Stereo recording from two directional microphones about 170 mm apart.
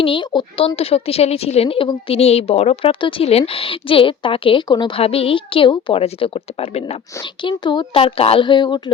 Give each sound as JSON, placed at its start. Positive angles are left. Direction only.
{"t": 0.0, "sound": "a woman's voice", "side_deg": 30}